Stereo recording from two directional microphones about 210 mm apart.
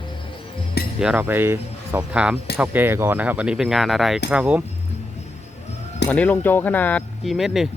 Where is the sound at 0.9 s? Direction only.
5° right (ahead or behind).